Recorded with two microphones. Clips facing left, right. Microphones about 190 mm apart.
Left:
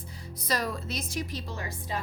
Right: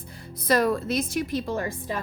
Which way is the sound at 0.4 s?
55° right (ahead or behind).